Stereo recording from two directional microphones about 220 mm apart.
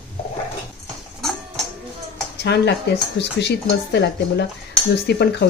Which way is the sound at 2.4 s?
50° left (ahead or behind).